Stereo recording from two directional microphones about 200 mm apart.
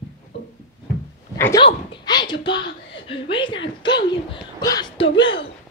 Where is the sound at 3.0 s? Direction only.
25° left (ahead or behind).